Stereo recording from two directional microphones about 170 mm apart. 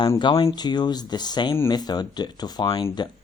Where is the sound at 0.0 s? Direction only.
25° left (ahead or behind).